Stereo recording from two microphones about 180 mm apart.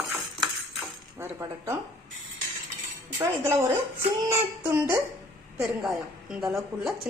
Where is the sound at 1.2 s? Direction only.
15° right (ahead or behind).